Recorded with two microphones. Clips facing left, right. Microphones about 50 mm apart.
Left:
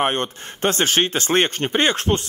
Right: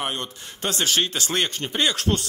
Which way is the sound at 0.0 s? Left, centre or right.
Left.